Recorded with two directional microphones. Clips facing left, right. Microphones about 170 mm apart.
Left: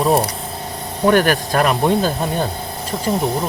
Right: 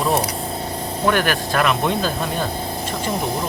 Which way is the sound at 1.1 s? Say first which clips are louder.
Left 5 dB; 45° left (ahead or behind).